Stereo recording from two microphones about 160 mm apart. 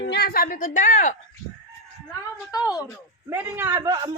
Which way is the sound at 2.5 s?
20° left (ahead or behind).